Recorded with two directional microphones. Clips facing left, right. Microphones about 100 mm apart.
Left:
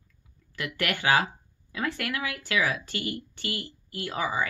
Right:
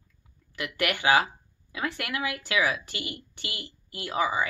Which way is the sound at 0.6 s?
20° right (ahead or behind).